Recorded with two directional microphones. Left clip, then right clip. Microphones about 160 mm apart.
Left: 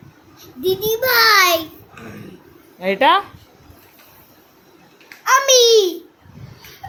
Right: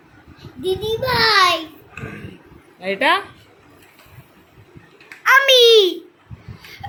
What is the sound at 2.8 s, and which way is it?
Speech, 25° left (ahead or behind).